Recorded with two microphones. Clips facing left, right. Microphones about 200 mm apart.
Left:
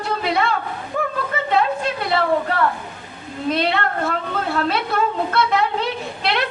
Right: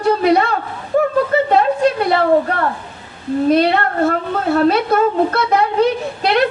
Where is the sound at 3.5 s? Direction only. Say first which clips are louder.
Right 5 dB; 45° right (ahead or behind).